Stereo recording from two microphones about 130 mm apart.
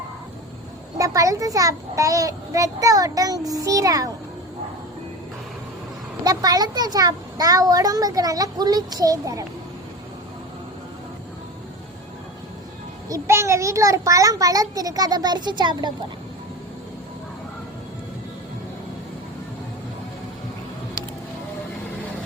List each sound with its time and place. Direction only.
0.9 s a child's voice: 25° right (ahead or behind)
6.2 s a child's voice: 30° right (ahead or behind)
13.1 s a child's voice: 25° right (ahead or behind)